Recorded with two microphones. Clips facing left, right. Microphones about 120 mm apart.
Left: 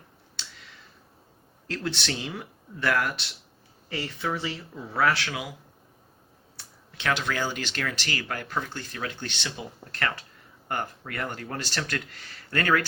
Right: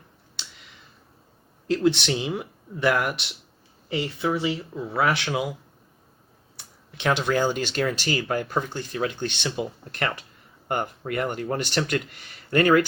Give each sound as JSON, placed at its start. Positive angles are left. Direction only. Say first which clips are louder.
{"t": 1.6, "sound": "speech", "louder": "right 10 dB", "side_deg": -15}
{"t": 6.6, "sound": "speech", "louder": "right 7 dB", "side_deg": -20}